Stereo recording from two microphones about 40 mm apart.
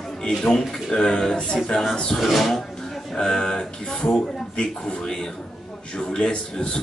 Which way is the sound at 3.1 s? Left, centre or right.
Centre.